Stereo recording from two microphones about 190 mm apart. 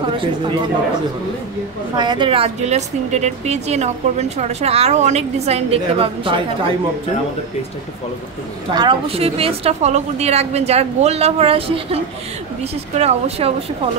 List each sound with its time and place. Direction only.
2.0 s a woman's voice: 25° right (ahead or behind)
8.7 s a woman's voice: 30° right (ahead or behind)